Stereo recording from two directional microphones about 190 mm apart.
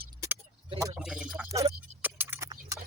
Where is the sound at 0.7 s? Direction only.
15° right (ahead or behind).